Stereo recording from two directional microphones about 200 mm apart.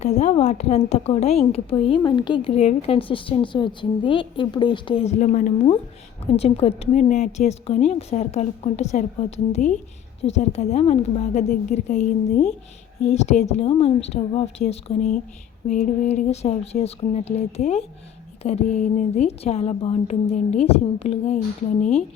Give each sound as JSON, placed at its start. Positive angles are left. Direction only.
{"t": 0.0, "sound": "a woman's voice", "side_deg": 35}